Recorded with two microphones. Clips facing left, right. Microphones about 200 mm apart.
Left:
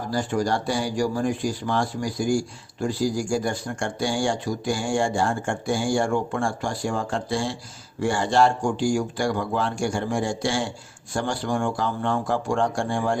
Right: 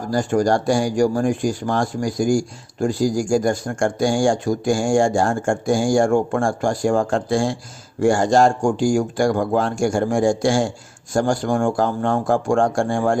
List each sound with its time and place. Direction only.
0.1 s speech: 45° right (ahead or behind)